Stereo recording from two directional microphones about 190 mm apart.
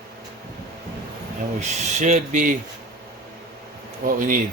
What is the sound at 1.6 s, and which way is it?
Speech, 40° right (ahead or behind).